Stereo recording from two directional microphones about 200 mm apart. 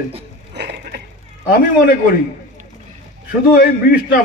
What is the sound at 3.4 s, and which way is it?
Speech, 50° left (ahead or behind).